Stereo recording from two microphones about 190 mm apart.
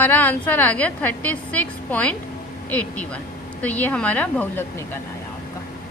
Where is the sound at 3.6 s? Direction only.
10° left (ahead or behind).